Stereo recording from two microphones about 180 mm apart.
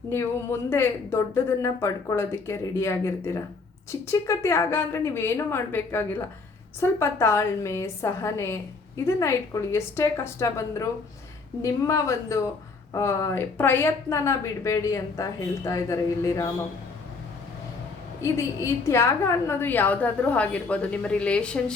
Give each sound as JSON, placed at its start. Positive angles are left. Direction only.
{"t": 0.7, "sound": "a woman's voice", "side_deg": 15}
{"t": 18.2, "sound": "a woman's voice", "side_deg": 15}